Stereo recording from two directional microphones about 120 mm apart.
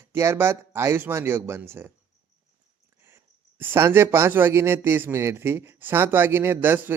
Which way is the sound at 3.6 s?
20° right (ahead or behind).